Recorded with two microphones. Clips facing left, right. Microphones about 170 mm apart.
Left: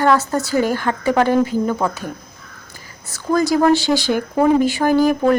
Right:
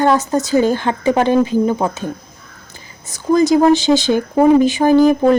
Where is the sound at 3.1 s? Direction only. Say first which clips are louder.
Right 5 dB; 20° right (ahead or behind).